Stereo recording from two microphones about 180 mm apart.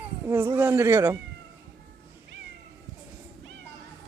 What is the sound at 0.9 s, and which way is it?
Speech, 20° right (ahead or behind).